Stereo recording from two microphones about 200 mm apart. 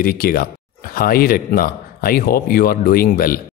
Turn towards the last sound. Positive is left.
turn(degrees=45)  # may be behind; listen again after turning